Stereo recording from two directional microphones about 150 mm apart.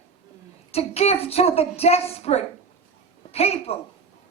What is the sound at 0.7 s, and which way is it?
A woman's voice, 45° left (ahead or behind).